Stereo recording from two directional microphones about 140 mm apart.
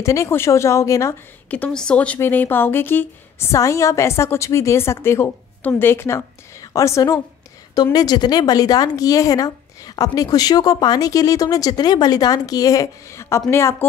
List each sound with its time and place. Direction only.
0.0 s speech: 20° left (ahead or behind)
1.5 s speech: 5° left (ahead or behind)